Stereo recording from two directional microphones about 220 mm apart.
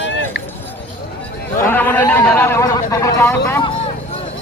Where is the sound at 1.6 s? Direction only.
10° left (ahead or behind).